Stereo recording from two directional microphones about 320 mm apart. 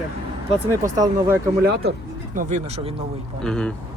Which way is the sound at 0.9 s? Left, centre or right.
Centre.